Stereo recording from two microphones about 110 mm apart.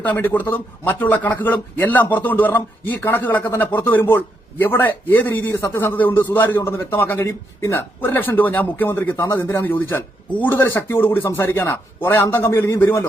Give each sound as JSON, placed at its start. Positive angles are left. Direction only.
{"t": 0.0, "sound": "a man's voice", "side_deg": 15}